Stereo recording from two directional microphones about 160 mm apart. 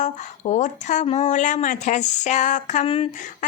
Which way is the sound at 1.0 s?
50° left (ahead or behind).